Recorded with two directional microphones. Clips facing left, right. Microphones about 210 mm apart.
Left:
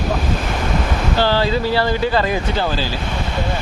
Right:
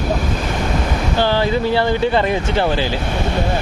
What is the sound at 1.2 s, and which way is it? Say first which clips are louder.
Speech: right 1 dB; 20° right (ahead or behind).